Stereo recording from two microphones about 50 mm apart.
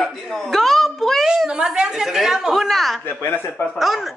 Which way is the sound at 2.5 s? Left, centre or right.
Centre.